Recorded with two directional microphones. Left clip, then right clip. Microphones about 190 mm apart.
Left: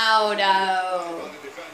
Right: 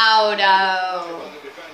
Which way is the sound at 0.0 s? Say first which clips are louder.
Right 4 dB; centre (ahead or behind).